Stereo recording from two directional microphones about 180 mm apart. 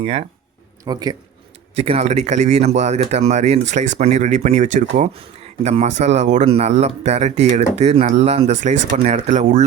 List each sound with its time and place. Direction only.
0.0 s speech: 30° right (ahead or behind)
0.9 s speech: 20° right (ahead or behind)
1.8 s speech: 35° right (ahead or behind)